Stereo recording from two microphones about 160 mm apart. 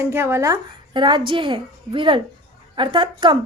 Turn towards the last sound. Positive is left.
turn(degrees=-30)  # may be behind; listen again after turning